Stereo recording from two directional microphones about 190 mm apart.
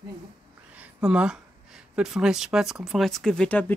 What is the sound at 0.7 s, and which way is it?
Speech, 5° right (ahead or behind).